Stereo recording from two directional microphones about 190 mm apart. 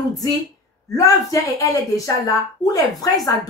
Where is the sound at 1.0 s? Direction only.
20° left (ahead or behind).